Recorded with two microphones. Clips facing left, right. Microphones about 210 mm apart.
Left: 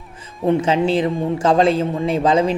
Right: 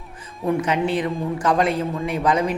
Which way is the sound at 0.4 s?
25° left (ahead or behind).